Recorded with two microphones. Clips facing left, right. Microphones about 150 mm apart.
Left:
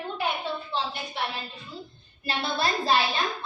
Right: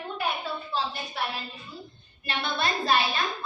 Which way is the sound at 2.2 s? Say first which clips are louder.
Left 1 dB; 30° left (ahead or behind).